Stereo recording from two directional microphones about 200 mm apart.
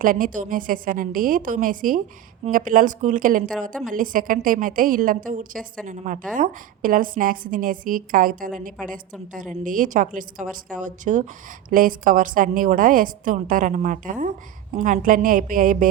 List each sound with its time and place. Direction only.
0.0 s a woman's voice: 40° right (ahead or behind)